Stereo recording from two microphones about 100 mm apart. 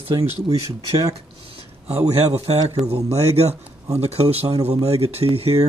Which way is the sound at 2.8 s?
90° right.